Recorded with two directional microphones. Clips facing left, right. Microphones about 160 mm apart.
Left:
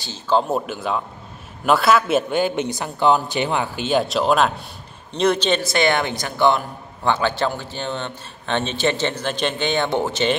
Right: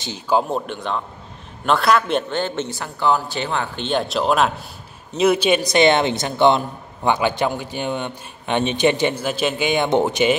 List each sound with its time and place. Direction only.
0.0 s speech: 15° right (ahead or behind)
0.5 s a man's voice: 5° left (ahead or behind); by 10.3 s 15° right (ahead or behind)